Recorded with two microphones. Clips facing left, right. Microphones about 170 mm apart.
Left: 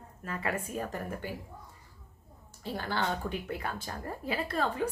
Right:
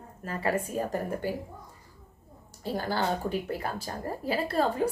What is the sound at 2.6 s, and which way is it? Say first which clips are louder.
Speech: right 4 dB; 40° right (ahead or behind).